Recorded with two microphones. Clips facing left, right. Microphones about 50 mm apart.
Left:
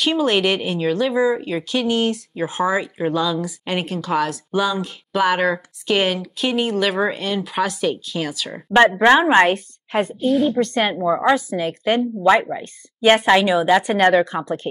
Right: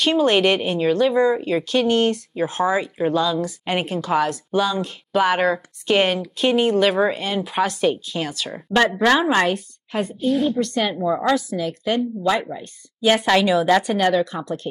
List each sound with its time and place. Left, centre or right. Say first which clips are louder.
0.0 s speech: right 1 dB; centre
8.7 s a woman's voice: left 4 dB; left
10.2 s speech: left 2 dB; centre
10.5 s a woman's voice: left 2 dB; left
11.0 s a woman's voice: left 3 dB; left
11.5 s a woman's voice: left 3 dB; left
13.2 s a woman's voice: left 2 dB; left
13.8 s a woman's voice: left 3 dB; left